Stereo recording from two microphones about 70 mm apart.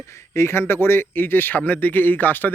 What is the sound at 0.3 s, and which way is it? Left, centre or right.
Speech, left.